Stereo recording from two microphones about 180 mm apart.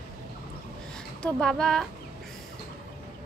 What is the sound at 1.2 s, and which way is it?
Speech, 5° left (ahead or behind).